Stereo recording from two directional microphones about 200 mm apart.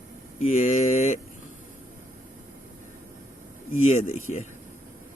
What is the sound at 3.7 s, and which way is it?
Speech, 35° left (ahead or behind).